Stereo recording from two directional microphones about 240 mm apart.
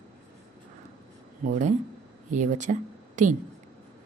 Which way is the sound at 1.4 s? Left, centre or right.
Right.